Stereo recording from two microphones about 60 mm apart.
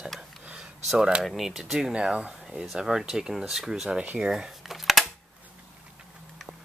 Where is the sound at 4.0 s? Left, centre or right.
Right.